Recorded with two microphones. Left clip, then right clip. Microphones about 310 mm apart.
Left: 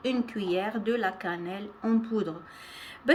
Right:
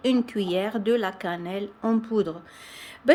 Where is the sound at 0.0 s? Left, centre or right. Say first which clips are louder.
Right 6 dB; centre.